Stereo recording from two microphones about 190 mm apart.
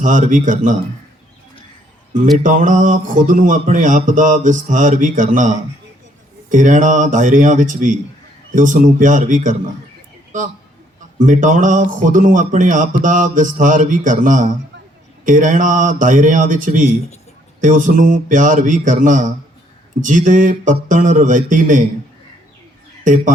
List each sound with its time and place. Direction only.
0.0 s speech: 45° right (ahead or behind)
2.4 s speech: 45° right (ahead or behind)
11.2 s speech: 40° right (ahead or behind)
23.1 s speech: 45° right (ahead or behind)